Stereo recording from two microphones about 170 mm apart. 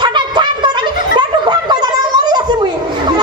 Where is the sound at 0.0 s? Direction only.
25° right (ahead or behind).